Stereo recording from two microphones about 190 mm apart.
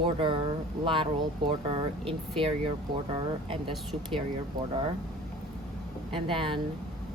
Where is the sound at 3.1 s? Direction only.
25° right (ahead or behind).